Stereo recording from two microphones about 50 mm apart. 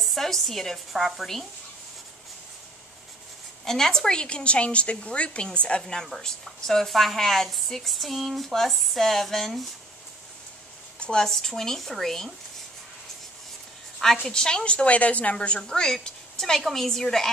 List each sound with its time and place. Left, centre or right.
0.0 s a woman's voice: centre
3.6 s a woman's voice: centre
11.0 s a woman's voice: centre
14.2 s a woman's voice: centre